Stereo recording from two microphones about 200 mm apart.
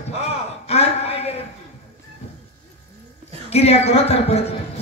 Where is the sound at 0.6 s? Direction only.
30° left (ahead or behind).